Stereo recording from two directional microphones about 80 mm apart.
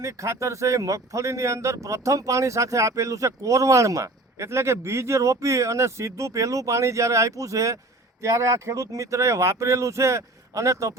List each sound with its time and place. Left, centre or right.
0.0 s speech: right